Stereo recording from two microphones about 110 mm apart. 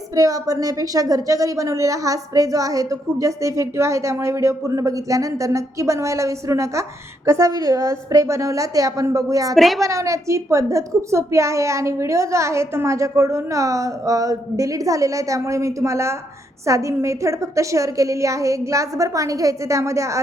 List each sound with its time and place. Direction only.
0.2 s a woman's voice: 35° right (ahead or behind)
9.6 s a woman's voice: centre (ahead or behind)
9.8 s a woman's voice: 30° right (ahead or behind)